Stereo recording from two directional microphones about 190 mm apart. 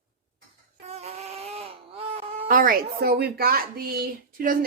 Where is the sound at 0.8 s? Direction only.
35° right (ahead or behind).